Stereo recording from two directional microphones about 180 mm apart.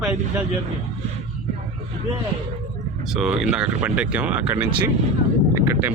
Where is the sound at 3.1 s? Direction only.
5° right (ahead or behind).